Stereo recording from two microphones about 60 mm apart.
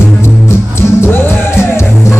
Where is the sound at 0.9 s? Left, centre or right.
Left.